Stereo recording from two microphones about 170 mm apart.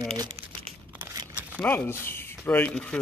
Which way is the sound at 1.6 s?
10° left (ahead or behind).